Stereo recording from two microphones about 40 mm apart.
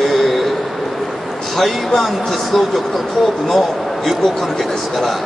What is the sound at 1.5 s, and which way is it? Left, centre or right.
A man's voice, centre.